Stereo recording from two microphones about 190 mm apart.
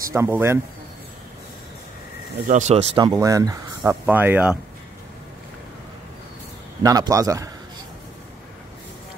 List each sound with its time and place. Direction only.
0.1 s a man's voice: 15° right (ahead or behind)
2.4 s speech: 40° right (ahead or behind)
3.0 s a man's voice: 20° right (ahead or behind)
6.8 s a man's voice: 20° right (ahead or behind)